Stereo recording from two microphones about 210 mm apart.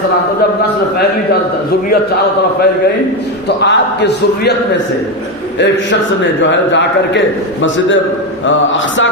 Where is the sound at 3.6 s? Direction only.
55° left (ahead or behind).